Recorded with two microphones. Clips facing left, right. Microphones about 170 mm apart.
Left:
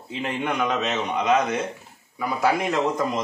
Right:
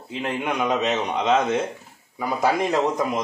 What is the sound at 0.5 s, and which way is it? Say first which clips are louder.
A man's voice: right 3 dB; 15° right (ahead or behind).